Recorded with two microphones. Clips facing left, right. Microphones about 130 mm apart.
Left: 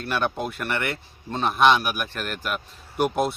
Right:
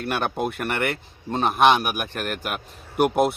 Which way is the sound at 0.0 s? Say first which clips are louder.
Right 1 dB; 50° right (ahead or behind).